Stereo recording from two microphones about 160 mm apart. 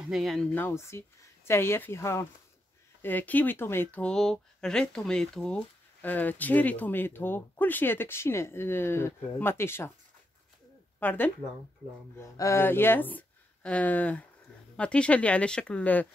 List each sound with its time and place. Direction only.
0.1 s speech: centre (ahead or behind)
11.0 s speech: 10° left (ahead or behind)
12.4 s speech: 15° left (ahead or behind)